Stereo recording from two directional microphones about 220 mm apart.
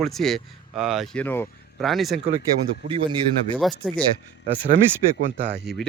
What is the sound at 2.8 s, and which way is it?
Speech, 25° right (ahead or behind).